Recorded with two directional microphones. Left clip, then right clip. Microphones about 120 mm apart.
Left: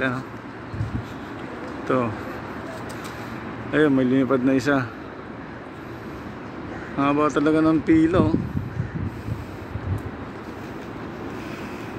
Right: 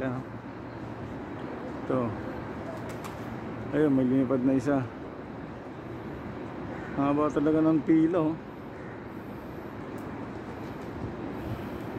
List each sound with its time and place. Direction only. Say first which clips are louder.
1.9 s speech: left 7 dB; 10° left (ahead or behind)
3.7 s speech: left 6 dB; 10° left (ahead or behind)
7.0 s speech: left 6 dB; 10° left (ahead or behind)